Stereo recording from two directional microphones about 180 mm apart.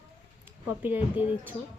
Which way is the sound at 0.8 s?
10° right (ahead or behind).